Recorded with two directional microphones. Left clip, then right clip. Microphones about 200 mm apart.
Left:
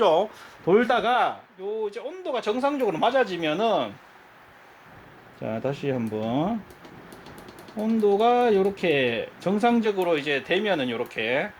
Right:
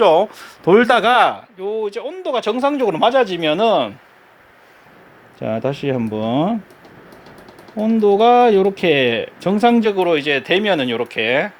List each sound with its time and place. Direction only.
0.0 s speech: 30° right (ahead or behind); by 3.9 s 45° right (ahead or behind)
5.4 s speech: 50° right (ahead or behind)
7.8 s speech: 45° right (ahead or behind)